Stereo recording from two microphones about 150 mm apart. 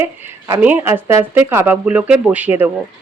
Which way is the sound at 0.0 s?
20° right (ahead or behind).